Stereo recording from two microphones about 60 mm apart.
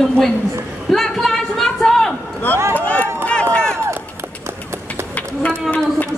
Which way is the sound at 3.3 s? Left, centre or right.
Centre.